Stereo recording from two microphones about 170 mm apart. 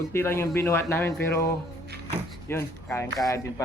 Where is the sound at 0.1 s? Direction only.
15° left (ahead or behind).